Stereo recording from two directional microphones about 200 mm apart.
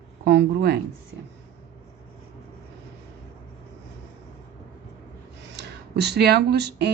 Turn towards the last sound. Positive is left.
turn(degrees=-55)  # may be behind; listen again after turning